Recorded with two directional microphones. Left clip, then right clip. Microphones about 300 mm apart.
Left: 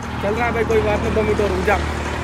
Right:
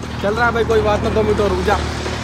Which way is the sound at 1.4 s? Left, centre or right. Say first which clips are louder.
Right 1 dB; left.